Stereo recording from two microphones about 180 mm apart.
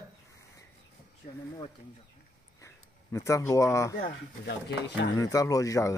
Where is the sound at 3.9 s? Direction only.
65° left (ahead or behind).